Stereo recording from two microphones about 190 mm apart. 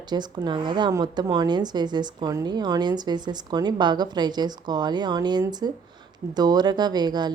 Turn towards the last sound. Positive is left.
turn(degrees=-20)  # may be behind; listen again after turning